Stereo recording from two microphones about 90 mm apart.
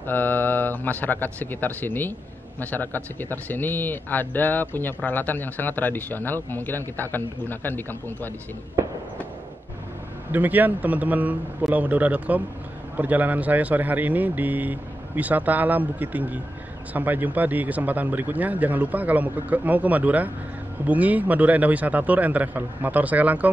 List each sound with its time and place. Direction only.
0.0 s a man's voice: 20° left (ahead or behind)
8.8 s a sound: 30° right (ahead or behind)
10.3 s a man's voice: 20° right (ahead or behind)